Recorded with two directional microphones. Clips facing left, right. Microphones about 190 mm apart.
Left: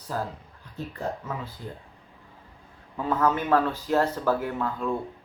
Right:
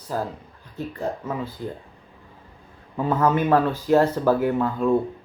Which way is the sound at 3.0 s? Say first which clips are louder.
Right 4 dB; 15° right (ahead or behind).